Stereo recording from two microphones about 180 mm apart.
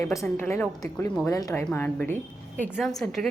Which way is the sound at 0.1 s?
15° left (ahead or behind).